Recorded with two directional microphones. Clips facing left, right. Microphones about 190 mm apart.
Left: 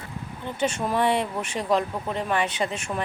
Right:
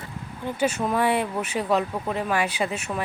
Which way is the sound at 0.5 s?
5° right (ahead or behind).